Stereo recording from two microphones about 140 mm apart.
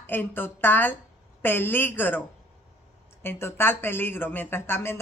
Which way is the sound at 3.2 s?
15° left (ahead or behind).